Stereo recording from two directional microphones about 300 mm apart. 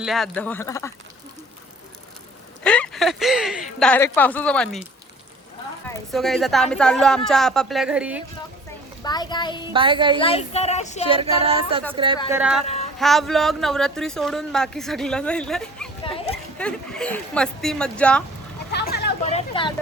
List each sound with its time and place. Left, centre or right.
0.0 s speech: centre
2.6 s speech: centre
6.1 s speech: centre
9.0 s a child's voice: centre
9.7 s a woman's voice: centre
10.2 s speech: centre
11.4 s a sound: centre
12.3 s speech: centre
12.6 s a sound: left
13.0 s speech: centre
16.0 s a sound: centre
16.6 s speech: centre
18.7 s vehicle: left
19.3 s speech: centre